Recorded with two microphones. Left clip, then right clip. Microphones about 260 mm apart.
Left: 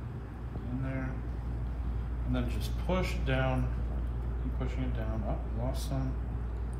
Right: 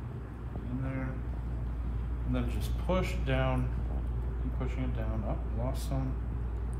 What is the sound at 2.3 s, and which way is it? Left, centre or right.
Speech, right.